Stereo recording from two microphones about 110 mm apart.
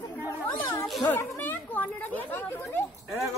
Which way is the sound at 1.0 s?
20° left (ahead or behind).